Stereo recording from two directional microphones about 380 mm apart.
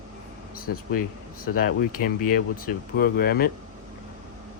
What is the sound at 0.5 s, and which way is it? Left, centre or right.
Speech, left.